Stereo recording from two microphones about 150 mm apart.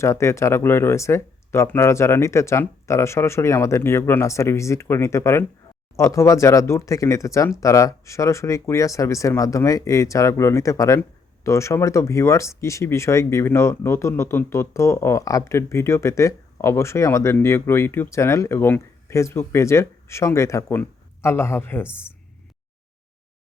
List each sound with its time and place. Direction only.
0.0 s speech: 20° left (ahead or behind)